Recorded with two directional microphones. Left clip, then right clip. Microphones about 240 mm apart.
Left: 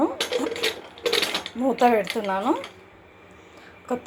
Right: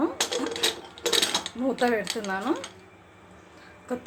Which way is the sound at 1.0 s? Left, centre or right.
Centre.